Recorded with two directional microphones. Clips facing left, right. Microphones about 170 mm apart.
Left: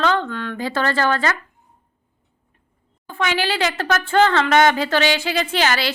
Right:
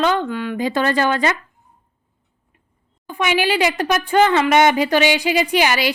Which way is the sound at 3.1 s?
15° right (ahead or behind).